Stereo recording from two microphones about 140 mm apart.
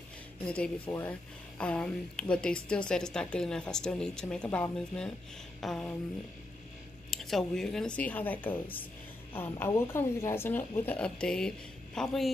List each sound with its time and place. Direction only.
0.5 s a woman's voice: 10° left (ahead or behind)
7.1 s a woman's voice: centre (ahead or behind)